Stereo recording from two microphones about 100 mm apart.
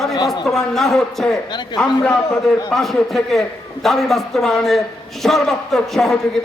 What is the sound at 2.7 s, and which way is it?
A man's voice, 5° left (ahead or behind).